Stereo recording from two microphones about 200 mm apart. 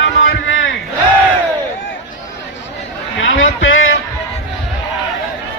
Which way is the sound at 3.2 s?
75° left (ahead or behind).